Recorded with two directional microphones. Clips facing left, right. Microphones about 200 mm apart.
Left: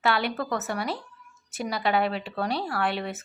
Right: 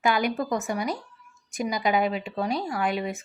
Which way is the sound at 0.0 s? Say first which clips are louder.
Right 2 dB; 15° right (ahead or behind).